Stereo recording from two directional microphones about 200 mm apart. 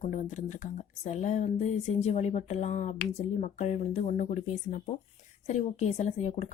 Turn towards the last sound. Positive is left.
turn(degrees=35)  # may be behind; listen again after turning